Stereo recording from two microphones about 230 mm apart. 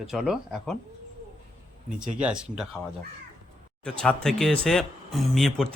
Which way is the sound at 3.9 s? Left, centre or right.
Centre.